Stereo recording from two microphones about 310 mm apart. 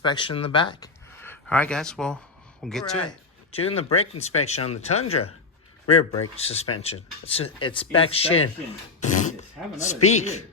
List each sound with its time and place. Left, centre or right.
0.0 s speech: centre
3.1 s speech: centre
6.3 s speech: centre
9.0 s a sound: left
9.7 s speech: left